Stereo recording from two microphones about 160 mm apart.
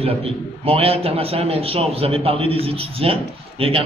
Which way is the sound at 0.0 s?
35° right (ahead or behind).